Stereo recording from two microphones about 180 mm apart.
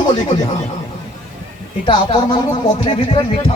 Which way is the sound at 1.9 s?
30° left (ahead or behind).